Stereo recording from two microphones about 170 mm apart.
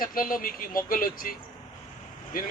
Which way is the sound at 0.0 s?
55° left (ahead or behind).